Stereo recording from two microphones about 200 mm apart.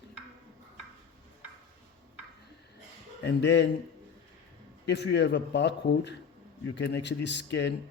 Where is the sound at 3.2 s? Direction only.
60° left (ahead or behind).